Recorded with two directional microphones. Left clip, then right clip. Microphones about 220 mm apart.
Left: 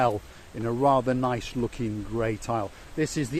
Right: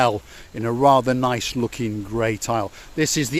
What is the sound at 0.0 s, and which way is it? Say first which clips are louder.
Speech: right 5 dB; 45° right (ahead or behind).